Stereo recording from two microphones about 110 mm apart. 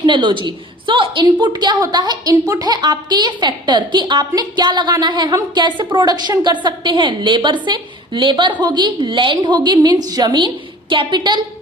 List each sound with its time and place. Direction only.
0.0 s a woman's voice: 45° right (ahead or behind)